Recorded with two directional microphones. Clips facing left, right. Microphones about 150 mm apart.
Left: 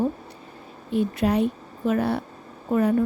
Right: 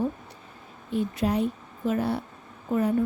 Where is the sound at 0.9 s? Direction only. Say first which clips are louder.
Left 4 dB; 70° left (ahead or behind).